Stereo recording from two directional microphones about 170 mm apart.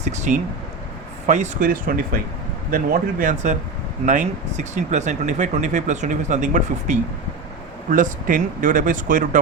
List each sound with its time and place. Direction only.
0.0 s speech: 45° right (ahead or behind)